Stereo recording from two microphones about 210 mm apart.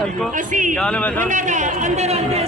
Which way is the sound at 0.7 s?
5° left (ahead or behind).